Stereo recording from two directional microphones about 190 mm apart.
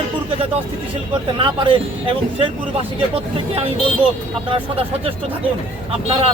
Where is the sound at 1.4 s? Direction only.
25° right (ahead or behind).